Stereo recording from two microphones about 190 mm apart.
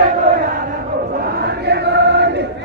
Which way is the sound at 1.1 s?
60° right (ahead or behind).